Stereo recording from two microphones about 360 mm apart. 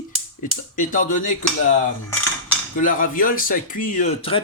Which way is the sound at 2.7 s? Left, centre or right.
Left.